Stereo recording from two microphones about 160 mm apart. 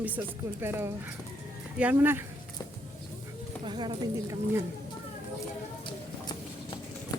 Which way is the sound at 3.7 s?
30° right (ahead or behind).